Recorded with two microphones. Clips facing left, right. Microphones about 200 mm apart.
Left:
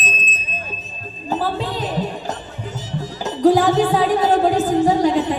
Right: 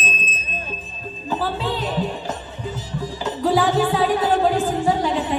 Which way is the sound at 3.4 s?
45° left (ahead or behind).